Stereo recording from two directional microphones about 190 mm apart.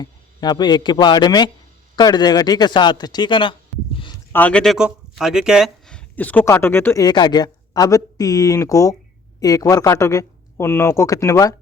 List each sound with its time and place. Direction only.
0.0 s speech: 20° left (ahead or behind)
3.9 s a sound: 25° left (ahead or behind)
4.3 s speech: 10° left (ahead or behind)